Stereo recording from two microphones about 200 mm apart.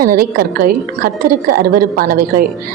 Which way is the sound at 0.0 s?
45° right (ahead or behind).